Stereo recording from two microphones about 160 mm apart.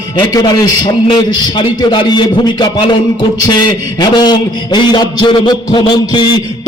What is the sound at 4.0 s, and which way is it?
Music, 25° left (ahead or behind).